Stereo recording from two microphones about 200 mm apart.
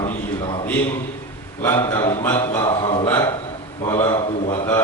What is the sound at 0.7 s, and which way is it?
A man's voice, 10° left (ahead or behind).